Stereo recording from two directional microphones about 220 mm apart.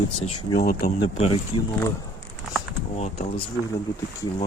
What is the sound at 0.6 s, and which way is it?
Speech, 45° left (ahead or behind).